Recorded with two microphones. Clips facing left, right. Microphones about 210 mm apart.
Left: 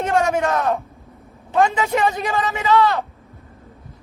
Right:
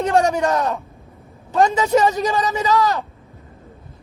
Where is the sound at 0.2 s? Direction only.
40° right (ahead or behind).